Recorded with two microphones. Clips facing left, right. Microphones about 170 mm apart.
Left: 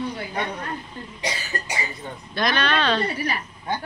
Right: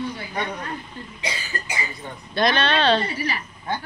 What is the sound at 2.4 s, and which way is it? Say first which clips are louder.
Speech: right 2 dB; 25° right (ahead or behind).